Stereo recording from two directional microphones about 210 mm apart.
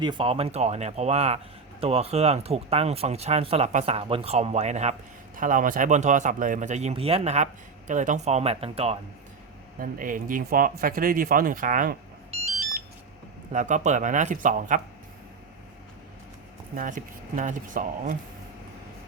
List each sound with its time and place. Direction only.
0.0 s speech: 25° right (ahead or behind)
9.8 s speech: 40° right (ahead or behind)
16.7 s speech: 40° right (ahead or behind)